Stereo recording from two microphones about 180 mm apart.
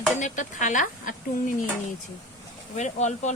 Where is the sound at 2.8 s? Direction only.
40° left (ahead or behind).